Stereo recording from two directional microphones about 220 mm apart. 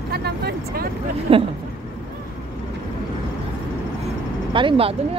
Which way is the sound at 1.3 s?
25° right (ahead or behind).